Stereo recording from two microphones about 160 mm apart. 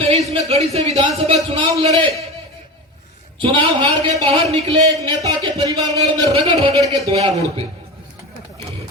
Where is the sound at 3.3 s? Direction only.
30° right (ahead or behind).